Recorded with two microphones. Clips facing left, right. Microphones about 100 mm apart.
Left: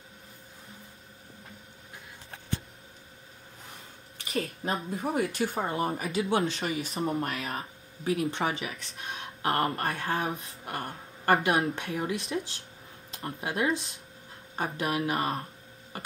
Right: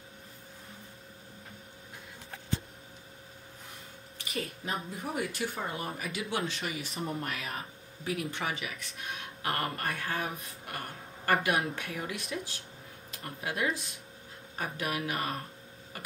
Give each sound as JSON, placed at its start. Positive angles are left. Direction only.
{"t": 4.3, "sound": "speech", "side_deg": 35}